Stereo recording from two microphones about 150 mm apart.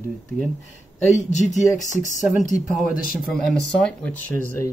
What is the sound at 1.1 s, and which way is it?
Speech, 50° left (ahead or behind).